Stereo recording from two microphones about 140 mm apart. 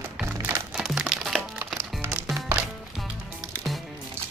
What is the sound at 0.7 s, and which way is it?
Music, 5° right (ahead or behind).